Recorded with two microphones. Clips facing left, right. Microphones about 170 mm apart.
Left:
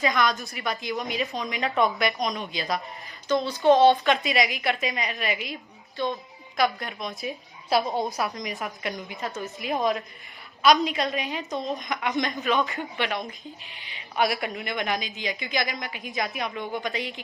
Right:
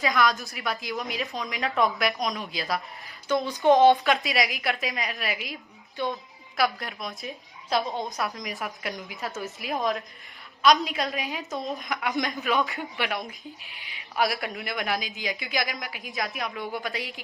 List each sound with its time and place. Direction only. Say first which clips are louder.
0.0 s a woman's voice: even; centre (ahead or behind)
3.4 s a woman's voice: even; 15° right (ahead or behind)
3.9 s a woman's voice: left 2 dB; centre (ahead or behind)